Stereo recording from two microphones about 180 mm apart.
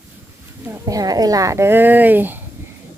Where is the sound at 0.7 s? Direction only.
20° right (ahead or behind).